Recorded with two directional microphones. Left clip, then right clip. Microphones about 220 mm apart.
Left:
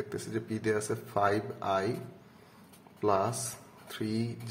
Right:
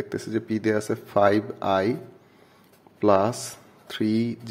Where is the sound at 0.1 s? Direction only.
30° right (ahead or behind).